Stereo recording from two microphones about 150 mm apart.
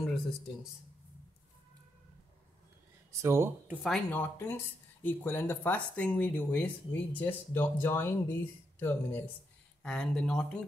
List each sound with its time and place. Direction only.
3.1 s speech: 20° right (ahead or behind)
3.8 s speech: 10° left (ahead or behind)